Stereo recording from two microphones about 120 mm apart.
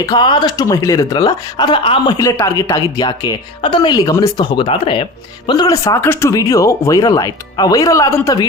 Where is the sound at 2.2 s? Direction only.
25° left (ahead or behind); by 5.1 s 45° left (ahead or behind).